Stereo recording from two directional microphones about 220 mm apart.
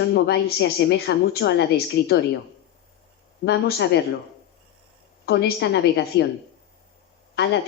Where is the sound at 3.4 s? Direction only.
50° left (ahead or behind).